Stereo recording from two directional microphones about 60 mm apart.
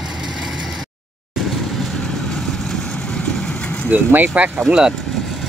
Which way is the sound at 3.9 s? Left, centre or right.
Right.